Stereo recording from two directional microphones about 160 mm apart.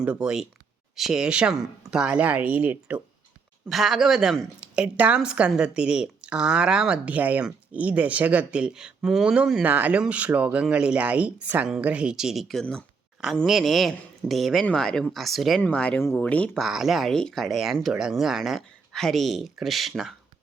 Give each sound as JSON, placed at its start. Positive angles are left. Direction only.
{"t": 0.0, "sound": "a woman's voice", "side_deg": -5}